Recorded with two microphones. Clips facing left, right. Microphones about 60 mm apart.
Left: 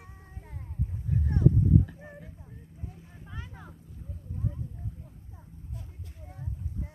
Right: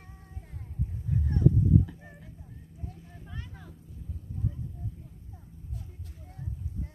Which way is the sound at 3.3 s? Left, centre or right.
Centre.